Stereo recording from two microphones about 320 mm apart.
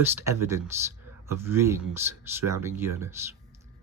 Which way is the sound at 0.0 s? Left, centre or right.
Centre.